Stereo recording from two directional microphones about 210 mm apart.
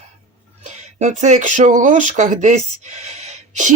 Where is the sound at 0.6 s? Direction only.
35° right (ahead or behind).